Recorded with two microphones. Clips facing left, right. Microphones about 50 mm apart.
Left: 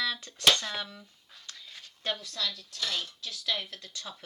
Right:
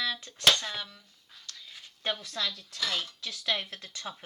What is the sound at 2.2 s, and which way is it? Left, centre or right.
Speech, right.